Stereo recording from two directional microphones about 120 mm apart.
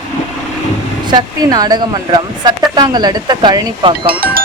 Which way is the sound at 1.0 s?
35° right (ahead or behind).